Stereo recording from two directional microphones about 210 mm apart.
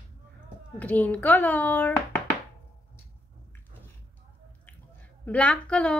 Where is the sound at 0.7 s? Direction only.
5° left (ahead or behind).